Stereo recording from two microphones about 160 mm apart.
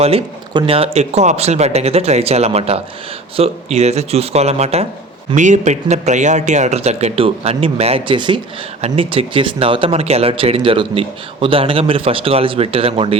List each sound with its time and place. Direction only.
0.0 s speech: 35° right (ahead or behind)